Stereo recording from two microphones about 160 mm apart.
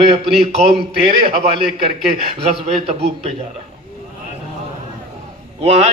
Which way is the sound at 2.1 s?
40° right (ahead or behind).